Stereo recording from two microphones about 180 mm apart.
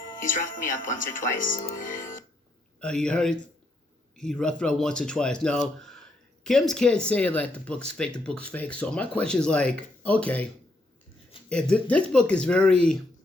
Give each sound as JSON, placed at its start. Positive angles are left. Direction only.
{"t": 0.2, "sound": "speech", "side_deg": 50}
{"t": 2.8, "sound": "speech", "side_deg": 5}